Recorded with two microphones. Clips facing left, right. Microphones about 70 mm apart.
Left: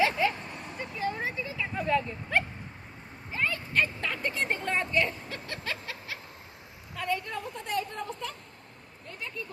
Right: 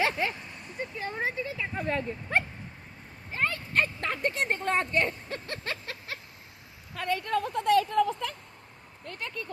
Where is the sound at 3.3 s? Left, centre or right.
Right.